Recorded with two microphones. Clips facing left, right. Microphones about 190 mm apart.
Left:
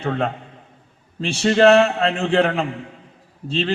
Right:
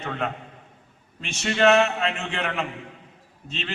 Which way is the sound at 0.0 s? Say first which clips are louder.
Left 7 dB; 35° left (ahead or behind).